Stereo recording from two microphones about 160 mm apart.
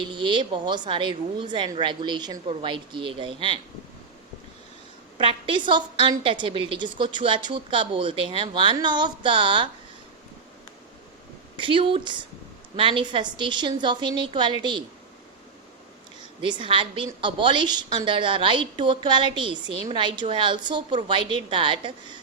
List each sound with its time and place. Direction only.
0.1 s a woman's voice: 30° right (ahead or behind)
5.1 s a woman's voice: 35° right (ahead or behind)
11.5 s a woman's voice: 30° right (ahead or behind)
16.4 s a woman's voice: 30° right (ahead or behind)